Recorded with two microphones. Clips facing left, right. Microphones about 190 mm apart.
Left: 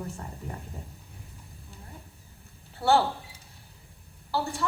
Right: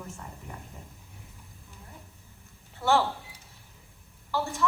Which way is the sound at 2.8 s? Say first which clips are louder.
Left 2 dB; 35° left (ahead or behind).